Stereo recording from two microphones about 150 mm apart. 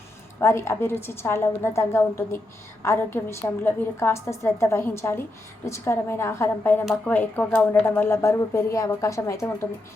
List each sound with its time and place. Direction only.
0.3 s a woman's voice: 15° left (ahead or behind)